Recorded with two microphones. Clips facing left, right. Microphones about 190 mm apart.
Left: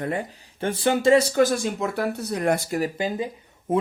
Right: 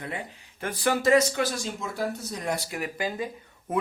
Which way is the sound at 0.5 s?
25° left (ahead or behind).